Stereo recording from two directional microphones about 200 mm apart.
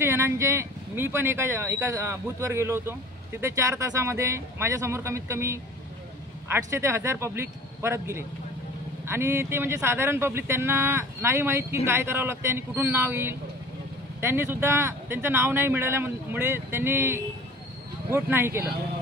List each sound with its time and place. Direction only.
0.0 s speech: 10° right (ahead or behind)